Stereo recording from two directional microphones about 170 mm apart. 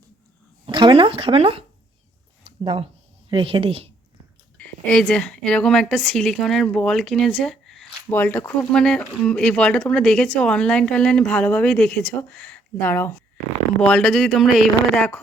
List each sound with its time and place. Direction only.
0.6 s speech: 30° right (ahead or behind)
2.6 s a woman's voice: 30° right (ahead or behind)
4.5 s a woman's voice: 5° left (ahead or behind)